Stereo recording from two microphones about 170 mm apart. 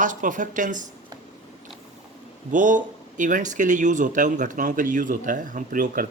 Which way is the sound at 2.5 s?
50° right (ahead or behind).